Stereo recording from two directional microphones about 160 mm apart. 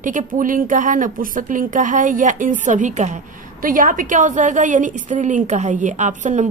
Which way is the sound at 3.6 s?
60° right (ahead or behind).